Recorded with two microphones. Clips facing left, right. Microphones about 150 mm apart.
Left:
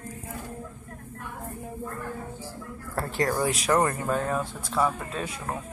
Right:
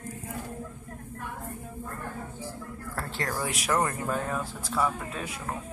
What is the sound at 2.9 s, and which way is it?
Speech, 20° left (ahead or behind).